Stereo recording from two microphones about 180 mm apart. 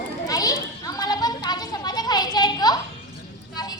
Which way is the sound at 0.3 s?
20° left (ahead or behind).